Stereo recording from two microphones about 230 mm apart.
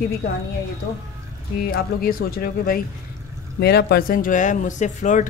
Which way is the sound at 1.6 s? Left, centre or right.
Left.